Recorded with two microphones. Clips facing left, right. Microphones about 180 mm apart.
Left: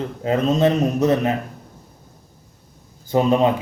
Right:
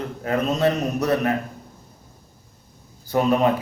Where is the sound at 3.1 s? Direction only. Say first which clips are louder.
Left 2 dB; 25° left (ahead or behind).